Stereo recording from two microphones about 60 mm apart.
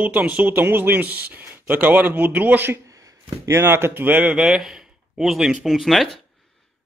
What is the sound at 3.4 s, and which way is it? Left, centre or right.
Speech, right.